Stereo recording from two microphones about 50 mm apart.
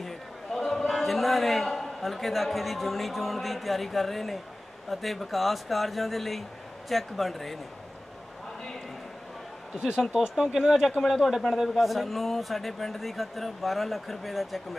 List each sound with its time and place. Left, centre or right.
0.0 s a sound: centre
4.8 s a man's voice: centre
9.8 s a man's voice: centre